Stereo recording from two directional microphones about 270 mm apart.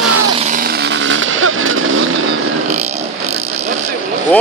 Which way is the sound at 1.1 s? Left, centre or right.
Right.